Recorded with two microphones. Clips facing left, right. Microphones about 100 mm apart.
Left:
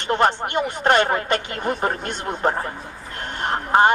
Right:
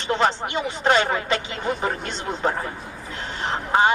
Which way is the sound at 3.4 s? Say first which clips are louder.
Left 3 dB; 55° left (ahead or behind).